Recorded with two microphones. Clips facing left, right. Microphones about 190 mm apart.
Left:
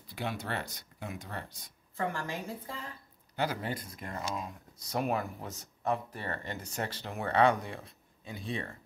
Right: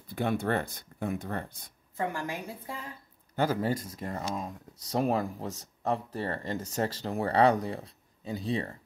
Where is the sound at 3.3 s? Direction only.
45° right (ahead or behind).